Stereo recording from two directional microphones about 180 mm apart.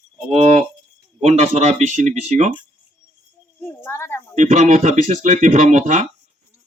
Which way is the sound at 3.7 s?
10° left (ahead or behind).